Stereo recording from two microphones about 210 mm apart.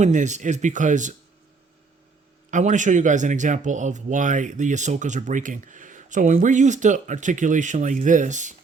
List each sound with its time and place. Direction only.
0.0 s speech: 35° right (ahead or behind)
2.5 s speech: 35° right (ahead or behind)